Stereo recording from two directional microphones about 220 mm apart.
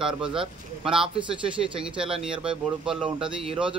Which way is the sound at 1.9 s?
25° right (ahead or behind).